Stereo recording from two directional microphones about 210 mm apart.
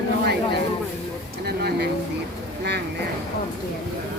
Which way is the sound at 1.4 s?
50° right (ahead or behind).